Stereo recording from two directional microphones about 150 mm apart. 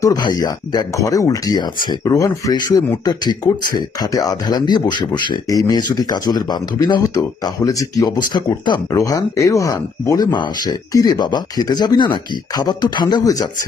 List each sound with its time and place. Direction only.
0.0 s speech: 25° left (ahead or behind)